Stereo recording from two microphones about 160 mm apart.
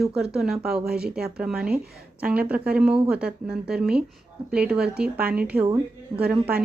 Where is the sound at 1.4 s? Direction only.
5° right (ahead or behind).